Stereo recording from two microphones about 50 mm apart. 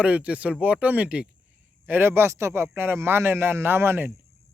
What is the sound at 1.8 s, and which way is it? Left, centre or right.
Speech, right.